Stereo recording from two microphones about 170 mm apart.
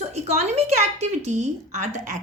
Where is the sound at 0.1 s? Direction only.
40° right (ahead or behind).